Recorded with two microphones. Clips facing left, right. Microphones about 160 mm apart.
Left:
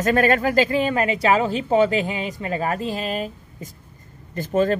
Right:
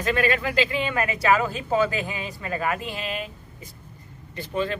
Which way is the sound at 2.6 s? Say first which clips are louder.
Left 3 dB; 40° left (ahead or behind).